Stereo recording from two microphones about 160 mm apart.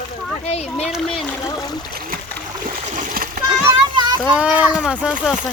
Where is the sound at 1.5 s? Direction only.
25° left (ahead or behind).